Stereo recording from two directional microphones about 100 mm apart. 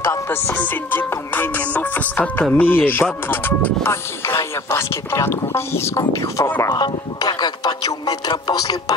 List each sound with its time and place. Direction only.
0.0 s music: 25° left (ahead or behind)
0.6 s speech: 20° left (ahead or behind)
6.7 s speech: 45° left (ahead or behind)